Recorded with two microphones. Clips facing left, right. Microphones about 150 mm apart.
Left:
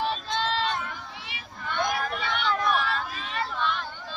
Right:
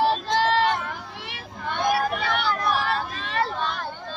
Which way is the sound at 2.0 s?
40° right (ahead or behind).